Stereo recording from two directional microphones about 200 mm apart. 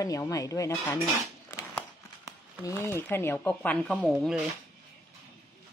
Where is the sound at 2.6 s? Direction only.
15° left (ahead or behind); by 4.4 s centre (ahead or behind).